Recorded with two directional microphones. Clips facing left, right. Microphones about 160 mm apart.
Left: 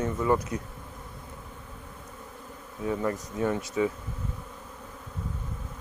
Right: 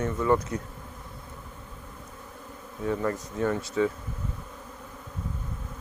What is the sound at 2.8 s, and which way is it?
Speech, 15° left (ahead or behind).